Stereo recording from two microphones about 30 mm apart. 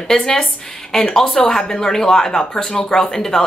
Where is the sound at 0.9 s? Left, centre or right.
Centre.